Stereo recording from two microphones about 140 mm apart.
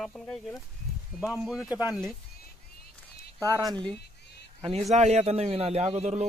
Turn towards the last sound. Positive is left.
turn(degrees=-50)  # may be behind; listen again after turning